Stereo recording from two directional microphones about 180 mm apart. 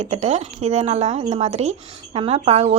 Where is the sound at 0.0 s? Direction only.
40° right (ahead or behind).